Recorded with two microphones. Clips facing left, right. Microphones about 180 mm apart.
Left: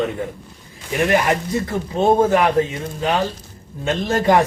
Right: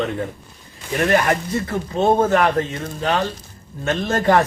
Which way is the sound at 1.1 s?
15° left (ahead or behind).